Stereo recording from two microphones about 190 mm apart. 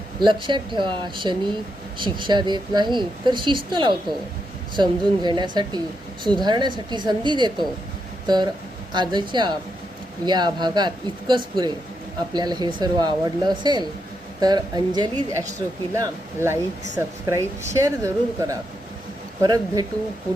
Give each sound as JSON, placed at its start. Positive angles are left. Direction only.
{"t": 0.2, "sound": "a woman's voice", "side_deg": -25}
{"t": 8.9, "sound": "a woman's voice", "side_deg": -25}